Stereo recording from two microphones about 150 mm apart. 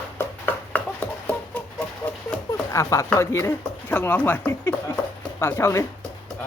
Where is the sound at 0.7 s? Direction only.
10° left (ahead or behind).